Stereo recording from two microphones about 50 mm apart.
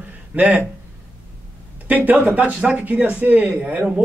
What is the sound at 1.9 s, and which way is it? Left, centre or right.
Speech, right.